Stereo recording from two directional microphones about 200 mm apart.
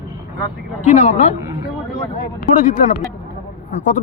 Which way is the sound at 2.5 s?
40° left (ahead or behind).